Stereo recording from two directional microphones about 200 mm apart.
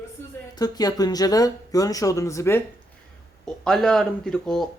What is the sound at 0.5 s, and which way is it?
Speech, 20° left (ahead or behind).